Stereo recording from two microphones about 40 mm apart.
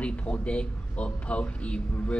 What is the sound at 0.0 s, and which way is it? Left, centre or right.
A man's voice, left.